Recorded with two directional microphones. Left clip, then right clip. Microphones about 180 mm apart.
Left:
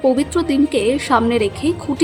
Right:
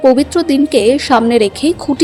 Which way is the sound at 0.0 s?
15° right (ahead or behind).